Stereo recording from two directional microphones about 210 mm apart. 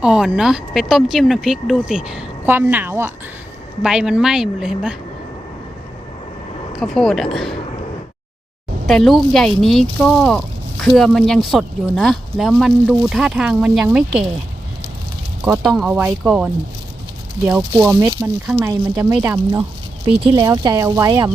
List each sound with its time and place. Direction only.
0.0 s speech: 5° right (ahead or behind)
6.7 s speech: centre (ahead or behind)
8.9 s speech: centre (ahead or behind)
15.4 s speech: 5° right (ahead or behind)
20.1 s speech: 25° right (ahead or behind)